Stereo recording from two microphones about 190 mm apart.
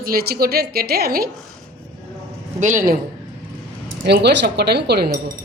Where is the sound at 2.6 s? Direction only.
40° right (ahead or behind).